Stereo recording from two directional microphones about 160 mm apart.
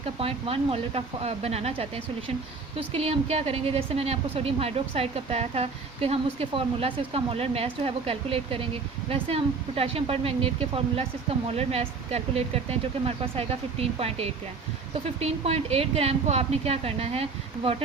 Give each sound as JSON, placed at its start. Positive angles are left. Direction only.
{"t": 0.2, "sound": "a woman's voice", "side_deg": -35}